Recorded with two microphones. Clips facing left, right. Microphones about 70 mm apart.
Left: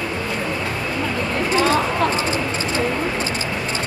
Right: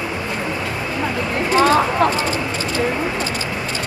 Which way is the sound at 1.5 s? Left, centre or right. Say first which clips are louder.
Right 4 dB; right.